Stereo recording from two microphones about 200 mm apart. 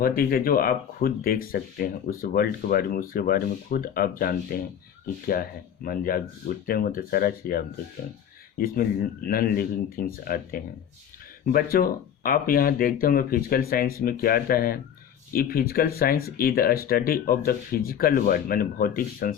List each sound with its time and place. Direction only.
0.0 s speech: 45° left (ahead or behind)